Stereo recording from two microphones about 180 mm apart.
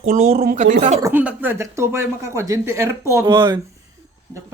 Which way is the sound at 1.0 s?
10° right (ahead or behind).